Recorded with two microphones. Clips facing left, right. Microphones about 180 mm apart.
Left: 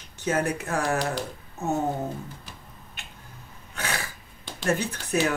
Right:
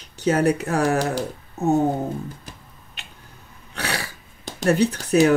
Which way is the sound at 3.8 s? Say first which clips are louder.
Right 3 dB; 35° right (ahead or behind).